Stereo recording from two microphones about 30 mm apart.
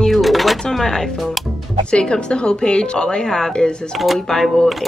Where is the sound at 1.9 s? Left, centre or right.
Left.